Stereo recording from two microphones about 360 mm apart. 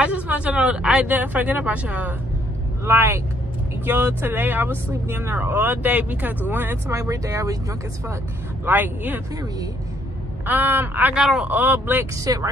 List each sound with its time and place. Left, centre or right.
0.0 s speech: centre
8.6 s speech: centre